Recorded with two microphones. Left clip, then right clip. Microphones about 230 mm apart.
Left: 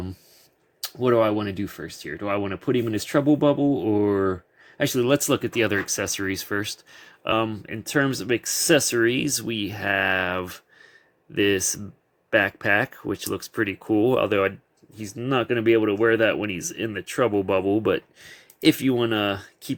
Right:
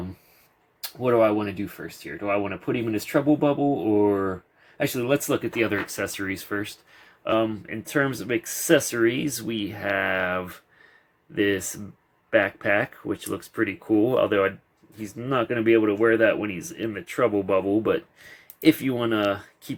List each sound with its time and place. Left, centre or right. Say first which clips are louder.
1.0 s speech: even; left